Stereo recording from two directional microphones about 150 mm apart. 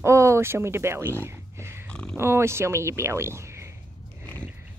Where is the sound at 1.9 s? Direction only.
5° left (ahead or behind).